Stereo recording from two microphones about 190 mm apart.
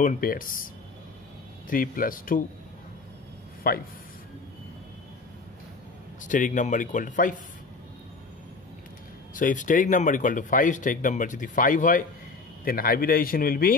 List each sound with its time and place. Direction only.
0.0 s speech: 45° left (ahead or behind)
1.7 s speech: 45° left (ahead or behind)
3.6 s speech: 50° left (ahead or behind)
6.2 s speech: 45° left (ahead or behind)
9.3 s speech: 45° left (ahead or behind)